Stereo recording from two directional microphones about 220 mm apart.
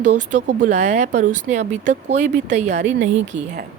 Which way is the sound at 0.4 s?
35° right (ahead or behind).